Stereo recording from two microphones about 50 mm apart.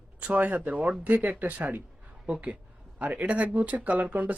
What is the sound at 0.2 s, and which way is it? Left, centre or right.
Speech, right.